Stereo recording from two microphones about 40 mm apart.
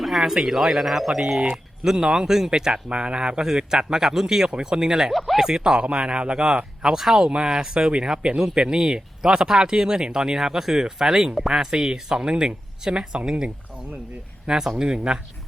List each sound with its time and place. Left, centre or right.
0.0 s speech: centre
5.1 s speech: centre
5.4 s speech: centre
6.8 s speech: centre
7.3 s speech: right
14.8 s speech: centre